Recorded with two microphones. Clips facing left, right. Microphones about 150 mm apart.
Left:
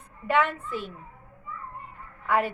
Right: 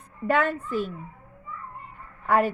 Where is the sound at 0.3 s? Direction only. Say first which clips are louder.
Right 1 dB; 40° right (ahead or behind).